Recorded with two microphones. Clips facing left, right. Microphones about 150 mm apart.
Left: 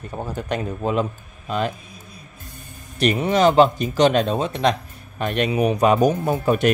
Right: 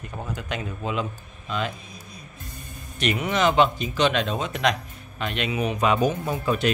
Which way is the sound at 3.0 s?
35° left (ahead or behind).